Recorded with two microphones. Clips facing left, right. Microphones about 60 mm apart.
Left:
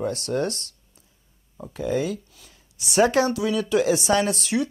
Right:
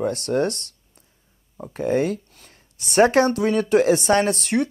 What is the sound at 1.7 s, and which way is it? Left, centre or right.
Speech, right.